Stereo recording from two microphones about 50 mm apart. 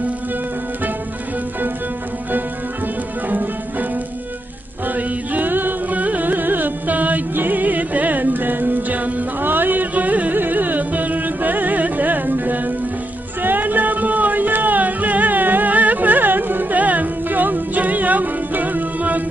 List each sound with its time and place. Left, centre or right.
3.2 s music: right
4.9 s music: right